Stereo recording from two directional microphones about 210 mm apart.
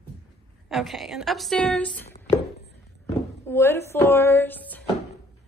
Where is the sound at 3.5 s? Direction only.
10° left (ahead or behind).